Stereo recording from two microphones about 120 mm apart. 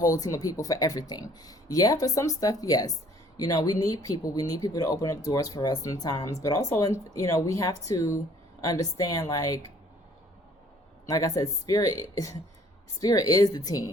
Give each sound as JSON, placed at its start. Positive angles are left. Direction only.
{"t": 0.0, "sound": "a woman's voice", "side_deg": 30}
{"t": 11.0, "sound": "a woman's voice", "side_deg": 30}